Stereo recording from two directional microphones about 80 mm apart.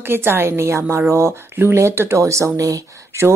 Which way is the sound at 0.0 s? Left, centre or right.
Right.